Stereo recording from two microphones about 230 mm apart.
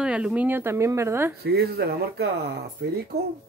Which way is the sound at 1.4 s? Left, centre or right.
Right.